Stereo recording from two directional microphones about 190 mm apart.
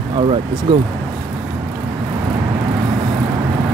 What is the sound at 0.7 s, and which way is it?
Speech, 25° right (ahead or behind).